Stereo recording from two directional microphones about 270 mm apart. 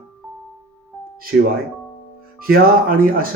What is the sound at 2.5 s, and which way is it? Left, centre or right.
Speech, right.